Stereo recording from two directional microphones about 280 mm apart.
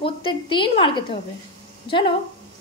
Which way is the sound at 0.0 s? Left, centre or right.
Centre.